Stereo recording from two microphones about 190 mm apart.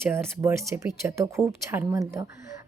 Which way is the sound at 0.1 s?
15° right (ahead or behind).